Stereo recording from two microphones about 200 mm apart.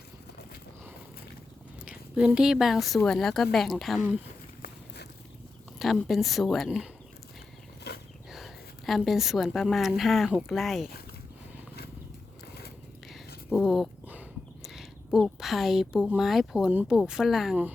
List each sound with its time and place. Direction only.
1.8 s a woman's voice: 5° right (ahead or behind)
5.8 s a woman's voice: centre (ahead or behind)
7.9 s wild animals: 55° left (ahead or behind)
8.3 s a woman's voice: centre (ahead or behind)
13.1 s speech: centre (ahead or behind)